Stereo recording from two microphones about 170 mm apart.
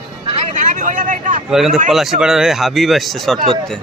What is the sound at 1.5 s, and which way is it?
Speech, 5° right (ahead or behind).